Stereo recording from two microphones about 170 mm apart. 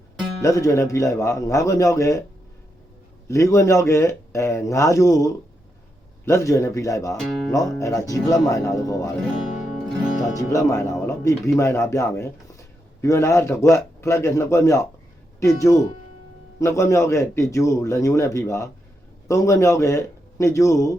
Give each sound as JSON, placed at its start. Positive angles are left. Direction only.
{"t": 0.4, "sound": "a man's voice", "side_deg": 20}
{"t": 3.2, "sound": "a man's voice", "side_deg": 15}
{"t": 7.2, "sound": "speech", "side_deg": 0}
{"t": 7.5, "sound": "speech", "side_deg": 20}
{"t": 10.3, "sound": "a man's voice", "side_deg": 20}